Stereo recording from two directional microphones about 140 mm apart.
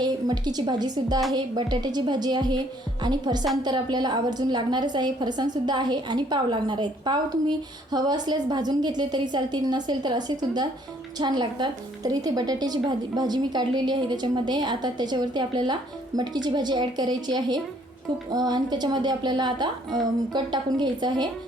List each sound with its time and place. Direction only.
0.0 s a woman's voice: 30° right (ahead or behind)